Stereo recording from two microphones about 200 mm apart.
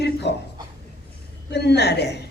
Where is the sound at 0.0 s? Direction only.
55° left (ahead or behind).